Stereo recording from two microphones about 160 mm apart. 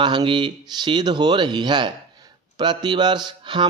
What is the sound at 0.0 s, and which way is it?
Speech, 30° right (ahead or behind).